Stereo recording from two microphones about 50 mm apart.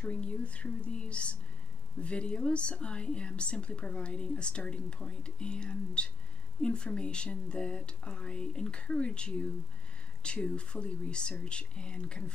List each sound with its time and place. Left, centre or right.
0.0 s speech: left